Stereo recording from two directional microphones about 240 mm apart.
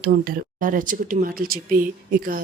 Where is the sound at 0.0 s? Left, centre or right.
Right.